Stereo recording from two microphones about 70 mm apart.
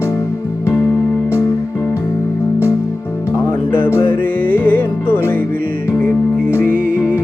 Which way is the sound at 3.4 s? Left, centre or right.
Left.